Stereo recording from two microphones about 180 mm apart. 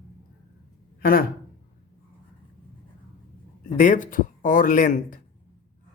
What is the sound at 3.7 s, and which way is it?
Speech, 45° left (ahead or behind).